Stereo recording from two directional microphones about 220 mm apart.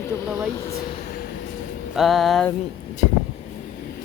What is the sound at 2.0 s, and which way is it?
Music, centre (ahead or behind).